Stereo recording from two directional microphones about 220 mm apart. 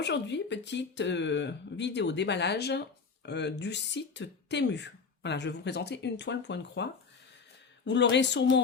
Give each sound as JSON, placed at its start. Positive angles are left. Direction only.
{"t": 0.0, "sound": "speech", "side_deg": 50}
{"t": 7.9, "sound": "speech", "side_deg": 55}